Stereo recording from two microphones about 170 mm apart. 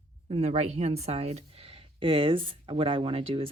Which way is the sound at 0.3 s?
40° right (ahead or behind).